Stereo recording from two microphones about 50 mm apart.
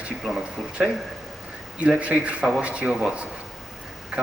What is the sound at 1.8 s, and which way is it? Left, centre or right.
A man's voice, right.